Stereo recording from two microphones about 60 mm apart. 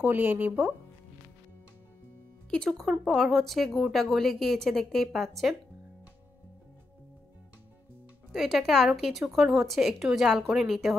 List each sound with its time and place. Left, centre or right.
0.0 s speech: right
2.5 s speech: centre
8.3 s a woman's voice: centre